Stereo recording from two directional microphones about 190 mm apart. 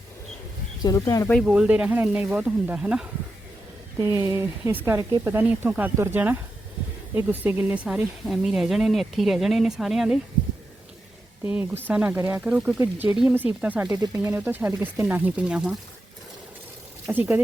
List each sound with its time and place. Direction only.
0.8 s speech: 20° left (ahead or behind)
1.3 s speech: centre (ahead or behind)
4.1 s speech: 15° right (ahead or behind)
11.4 s speech: 5° right (ahead or behind)
17.1 s speech: 10° right (ahead or behind)